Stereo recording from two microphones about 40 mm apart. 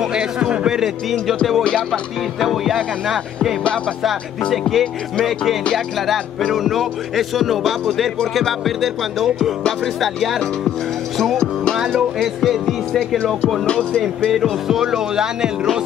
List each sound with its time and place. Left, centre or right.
0.1 s a man's voice: right
1.2 s music: centre
4.5 s music: centre
6.5 s music: centre
14.3 s music: centre